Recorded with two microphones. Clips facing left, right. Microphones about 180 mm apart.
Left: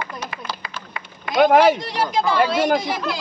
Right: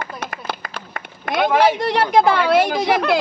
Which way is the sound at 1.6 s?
65° right (ahead or behind).